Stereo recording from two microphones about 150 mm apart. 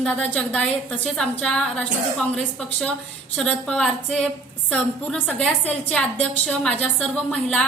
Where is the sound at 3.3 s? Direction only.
5° left (ahead or behind).